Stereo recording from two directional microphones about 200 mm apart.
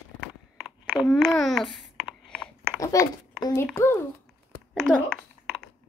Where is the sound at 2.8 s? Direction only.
15° left (ahead or behind).